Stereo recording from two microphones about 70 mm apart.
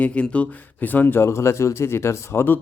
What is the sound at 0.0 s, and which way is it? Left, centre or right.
Speech, centre.